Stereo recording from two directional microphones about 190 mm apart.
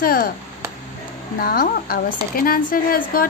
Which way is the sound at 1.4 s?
50° left (ahead or behind).